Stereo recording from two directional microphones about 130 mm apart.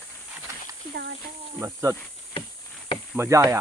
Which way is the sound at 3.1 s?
20° right (ahead or behind).